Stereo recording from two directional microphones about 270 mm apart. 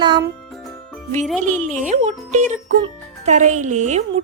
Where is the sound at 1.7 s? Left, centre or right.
Right.